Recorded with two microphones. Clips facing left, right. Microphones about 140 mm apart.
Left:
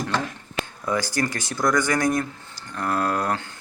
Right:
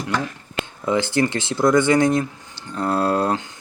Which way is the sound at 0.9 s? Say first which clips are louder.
Right 6 dB; 25° right (ahead or behind).